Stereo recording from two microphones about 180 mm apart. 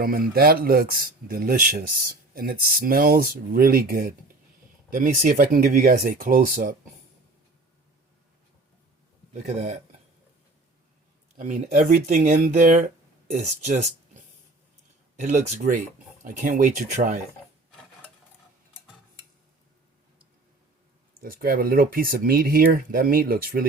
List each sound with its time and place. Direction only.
0.0 s speech: 55° right (ahead or behind)
9.3 s speech: 40° right (ahead or behind)
11.3 s speech: 40° right (ahead or behind)
21.2 s speech: 55° right (ahead or behind)